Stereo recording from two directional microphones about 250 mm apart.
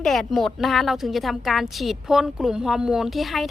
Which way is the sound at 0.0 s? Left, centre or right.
Centre.